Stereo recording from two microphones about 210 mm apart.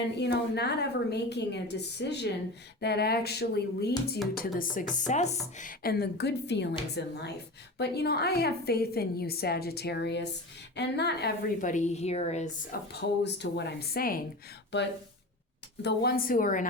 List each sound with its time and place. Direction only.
0.2 s a woman's voice: 50° left (ahead or behind); by 12.8 s 35° left (ahead or behind)
12.9 s a woman's voice: 55° left (ahead or behind)
15.8 s a woman's voice: 55° left (ahead or behind)